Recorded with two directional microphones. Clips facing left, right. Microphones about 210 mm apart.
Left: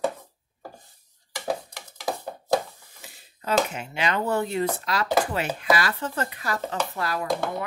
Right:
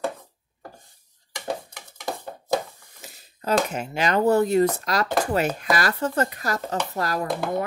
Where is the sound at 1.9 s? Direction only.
5° left (ahead or behind).